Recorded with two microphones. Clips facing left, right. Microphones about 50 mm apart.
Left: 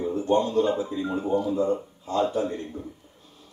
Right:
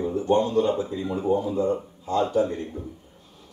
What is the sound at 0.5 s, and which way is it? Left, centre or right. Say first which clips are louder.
Speech: right 1 dB; left.